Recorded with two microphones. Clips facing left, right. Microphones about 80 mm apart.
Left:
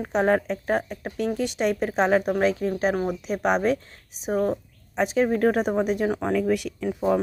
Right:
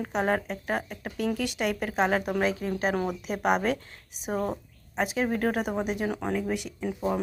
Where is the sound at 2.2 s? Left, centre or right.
Left.